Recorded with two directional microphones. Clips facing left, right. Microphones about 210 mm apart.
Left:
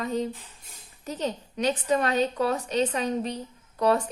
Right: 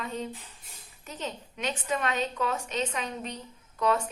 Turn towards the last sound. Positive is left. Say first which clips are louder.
# left 4 dB
turn(degrees=35)  # may be behind; listen again after turning